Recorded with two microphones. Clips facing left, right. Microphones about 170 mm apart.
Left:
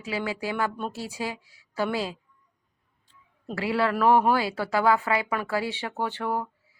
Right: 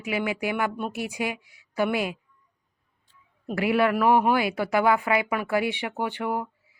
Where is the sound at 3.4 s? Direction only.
20° right (ahead or behind).